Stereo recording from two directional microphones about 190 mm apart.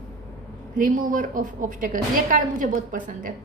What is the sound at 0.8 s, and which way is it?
A woman's voice, 45° right (ahead or behind).